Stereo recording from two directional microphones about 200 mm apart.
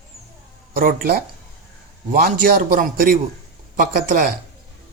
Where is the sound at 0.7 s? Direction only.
45° right (ahead or behind).